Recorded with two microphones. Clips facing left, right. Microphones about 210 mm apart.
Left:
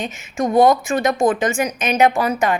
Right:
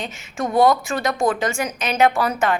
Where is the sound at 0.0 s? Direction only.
15° left (ahead or behind).